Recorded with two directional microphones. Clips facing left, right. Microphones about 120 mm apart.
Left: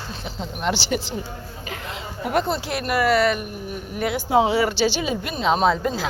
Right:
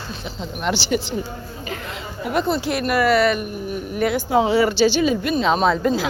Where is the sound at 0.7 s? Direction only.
40° left (ahead or behind).